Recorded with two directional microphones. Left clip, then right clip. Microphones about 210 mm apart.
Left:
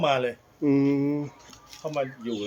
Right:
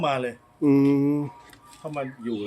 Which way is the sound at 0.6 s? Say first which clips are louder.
Right 3 dB; 20° right (ahead or behind).